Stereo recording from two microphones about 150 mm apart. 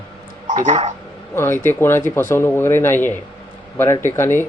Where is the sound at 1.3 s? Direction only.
15° left (ahead or behind).